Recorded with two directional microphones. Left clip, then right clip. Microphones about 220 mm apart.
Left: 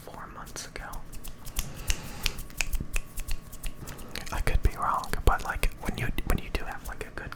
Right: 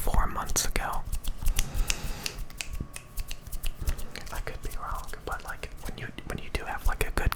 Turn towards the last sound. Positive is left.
turn(degrees=-20)  # may be behind; listen again after turning